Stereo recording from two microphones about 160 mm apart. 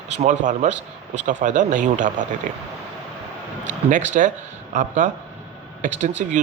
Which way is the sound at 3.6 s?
50° right (ahead or behind).